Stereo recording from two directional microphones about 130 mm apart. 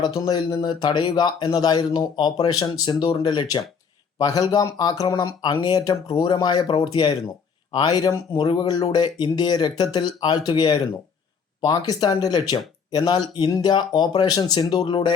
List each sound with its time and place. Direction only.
0.0 s speech: 30° left (ahead or behind)